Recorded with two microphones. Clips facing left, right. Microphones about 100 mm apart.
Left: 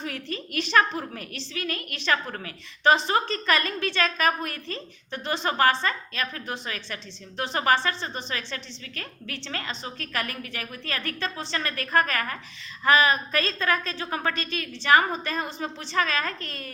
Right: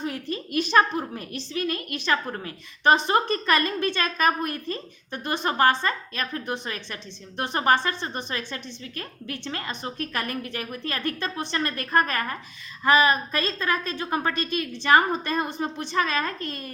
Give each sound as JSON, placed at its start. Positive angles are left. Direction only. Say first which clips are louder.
{"t": 0.0, "sound": "a woman's voice", "louder": "right 3 dB", "side_deg": -20}
{"t": 13.4, "sound": "a woman's voice", "louder": "even", "side_deg": -15}